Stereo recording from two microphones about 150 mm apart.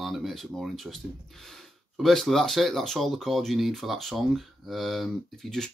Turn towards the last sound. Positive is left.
turn(degrees=0)  # may be behind; listen again after turning